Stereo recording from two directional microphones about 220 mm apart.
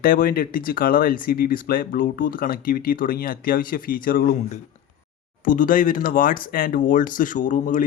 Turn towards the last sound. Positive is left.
turn(degrees=35)  # may be behind; listen again after turning